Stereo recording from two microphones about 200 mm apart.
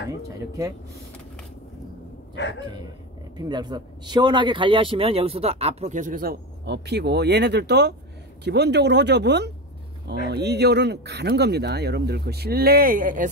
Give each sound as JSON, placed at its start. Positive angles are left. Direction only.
{"t": 0.5, "sound": "speech", "side_deg": -15}
{"t": 2.4, "sound": "speech", "side_deg": 60}
{"t": 3.3, "sound": "speech", "side_deg": -20}